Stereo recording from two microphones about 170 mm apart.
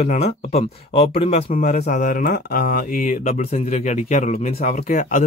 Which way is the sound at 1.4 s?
50° left (ahead or behind).